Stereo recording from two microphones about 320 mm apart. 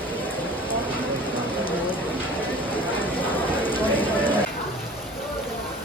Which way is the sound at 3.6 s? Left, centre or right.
Centre.